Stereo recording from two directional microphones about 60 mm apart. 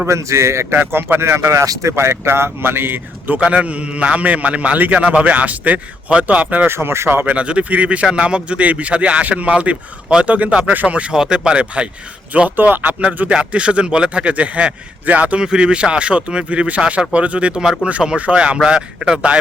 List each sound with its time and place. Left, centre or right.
0.1 s speech: right
0.7 s speech: right
1.9 s speech: right
3.4 s speech: right
6.7 s speech: right
7.3 s speech: right
12.5 s speech: right; by 19.4 s centre